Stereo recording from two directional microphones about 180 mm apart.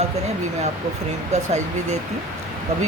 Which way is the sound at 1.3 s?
40° right (ahead or behind).